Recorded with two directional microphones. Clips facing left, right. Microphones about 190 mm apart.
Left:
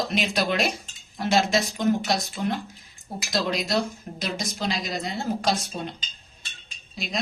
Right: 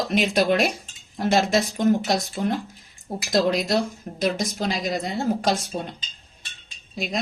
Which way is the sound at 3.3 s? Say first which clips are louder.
Right 5 dB; 50° right (ahead or behind).